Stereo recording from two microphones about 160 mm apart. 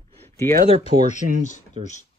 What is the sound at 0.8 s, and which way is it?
Speech, 45° left (ahead or behind).